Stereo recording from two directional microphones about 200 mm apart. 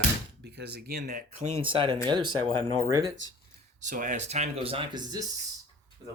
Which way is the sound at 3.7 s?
40° right (ahead or behind).